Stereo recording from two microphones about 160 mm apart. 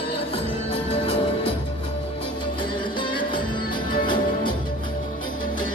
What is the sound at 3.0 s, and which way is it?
Music, 30° left (ahead or behind).